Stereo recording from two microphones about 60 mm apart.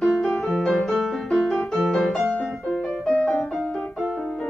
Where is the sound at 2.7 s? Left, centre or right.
Centre.